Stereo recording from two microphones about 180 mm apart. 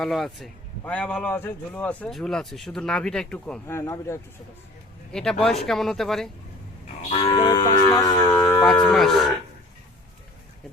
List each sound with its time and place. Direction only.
0.0 s speech: centre (ahead or behind)
5.1 s speech: 5° left (ahead or behind)
7.1 s a sound: 30° left (ahead or behind)
8.6 s speech: 5° left (ahead or behind)